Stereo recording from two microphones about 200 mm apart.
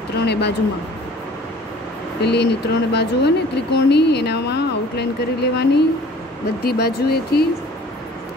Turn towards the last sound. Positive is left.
turn(degrees=50)  # may be behind; listen again after turning